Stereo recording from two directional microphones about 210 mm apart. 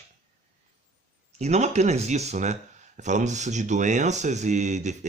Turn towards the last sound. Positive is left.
turn(degrees=-35)  # may be behind; listen again after turning